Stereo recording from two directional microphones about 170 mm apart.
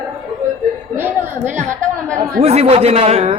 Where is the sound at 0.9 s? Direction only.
10° right (ahead or behind).